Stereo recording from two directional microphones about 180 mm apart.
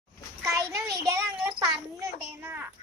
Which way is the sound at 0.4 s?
20° right (ahead or behind).